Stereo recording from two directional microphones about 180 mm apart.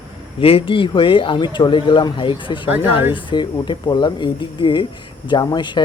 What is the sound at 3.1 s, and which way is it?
Speech, 25° left (ahead or behind).